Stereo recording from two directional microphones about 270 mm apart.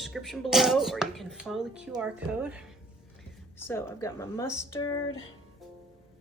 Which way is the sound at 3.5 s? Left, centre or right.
Centre.